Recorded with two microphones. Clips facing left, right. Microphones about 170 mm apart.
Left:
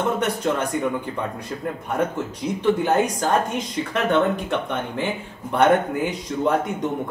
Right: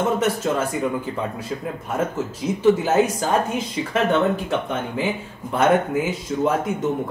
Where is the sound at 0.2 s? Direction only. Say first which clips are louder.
Right 1 dB; 5° right (ahead or behind).